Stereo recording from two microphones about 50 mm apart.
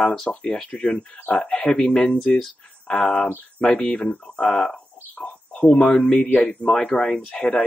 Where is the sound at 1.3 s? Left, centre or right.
Left.